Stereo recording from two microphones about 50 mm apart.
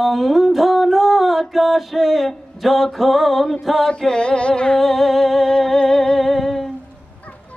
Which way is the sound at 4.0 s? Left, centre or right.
Centre.